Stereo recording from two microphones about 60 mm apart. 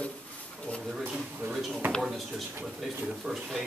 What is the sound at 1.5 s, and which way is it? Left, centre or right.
Speech, centre.